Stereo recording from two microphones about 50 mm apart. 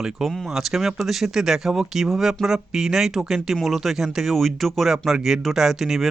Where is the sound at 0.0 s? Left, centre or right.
Centre.